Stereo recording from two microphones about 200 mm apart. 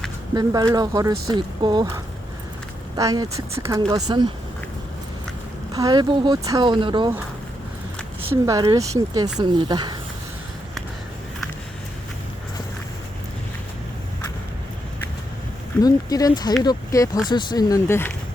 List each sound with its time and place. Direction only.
0.3 s speech: 20° right (ahead or behind)
2.9 s speech: 20° right (ahead or behind)
5.7 s speech: 20° right (ahead or behind)
8.4 s speech: 20° right (ahead or behind)
15.8 s speech: 20° left (ahead or behind)